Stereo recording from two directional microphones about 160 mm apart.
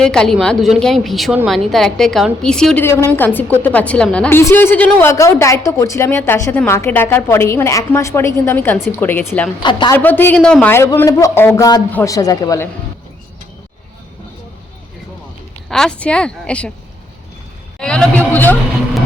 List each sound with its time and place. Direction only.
0.0 s speech: 5° left (ahead or behind)
2.8 s a woman's voice: 15° left (ahead or behind)
9.6 s speech: 30° left (ahead or behind)
9.9 s a woman's voice: 10° left (ahead or behind)
12.1 s speech: 20° left (ahead or behind)
15.7 s speech: 5° left (ahead or behind)
17.7 s a woman's voice: 5° left (ahead or behind)